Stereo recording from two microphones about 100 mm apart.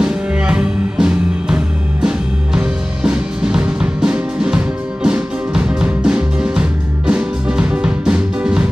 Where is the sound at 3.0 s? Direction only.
10° right (ahead or behind).